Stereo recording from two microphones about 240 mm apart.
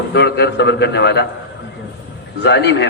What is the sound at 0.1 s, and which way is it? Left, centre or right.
A man's voice, left.